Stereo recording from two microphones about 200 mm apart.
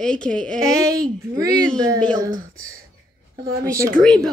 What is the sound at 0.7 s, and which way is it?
Speech, 15° right (ahead or behind).